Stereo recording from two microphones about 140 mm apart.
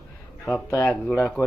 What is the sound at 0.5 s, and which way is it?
Speech, 15° left (ahead or behind).